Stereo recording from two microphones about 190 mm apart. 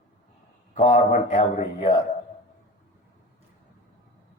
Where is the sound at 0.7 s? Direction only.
40° left (ahead or behind).